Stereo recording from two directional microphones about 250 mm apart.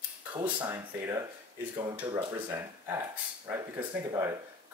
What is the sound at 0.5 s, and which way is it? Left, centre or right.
Speech, centre.